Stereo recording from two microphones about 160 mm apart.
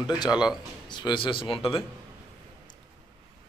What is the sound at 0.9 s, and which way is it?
Speech, 30° left (ahead or behind).